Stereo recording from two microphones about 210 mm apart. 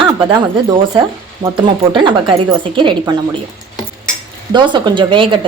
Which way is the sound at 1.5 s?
25° right (ahead or behind).